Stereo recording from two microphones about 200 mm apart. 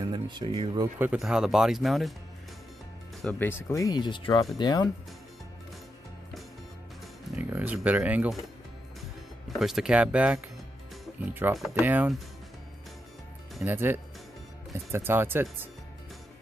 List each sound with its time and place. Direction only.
0.0 s speech: 20° right (ahead or behind)
0.9 s speech: 5° right (ahead or behind)
3.2 s speech: 5° left (ahead or behind)
7.3 s speech: 10° right (ahead or behind)
9.6 s speech: centre (ahead or behind)
11.5 s speech: 5° right (ahead or behind)
13.7 s speech: 10° right (ahead or behind)